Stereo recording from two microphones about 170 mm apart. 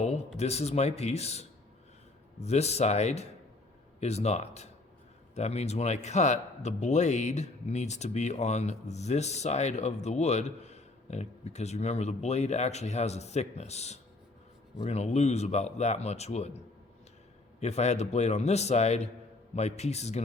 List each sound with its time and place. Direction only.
0.3 s speech: 40° left (ahead or behind)
17.6 s speech: 40° left (ahead or behind)